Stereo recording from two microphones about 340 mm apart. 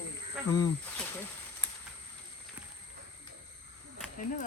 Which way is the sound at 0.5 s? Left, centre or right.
Centre.